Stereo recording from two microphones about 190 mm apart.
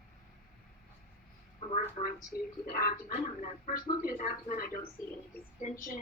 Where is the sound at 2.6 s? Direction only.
45° left (ahead or behind).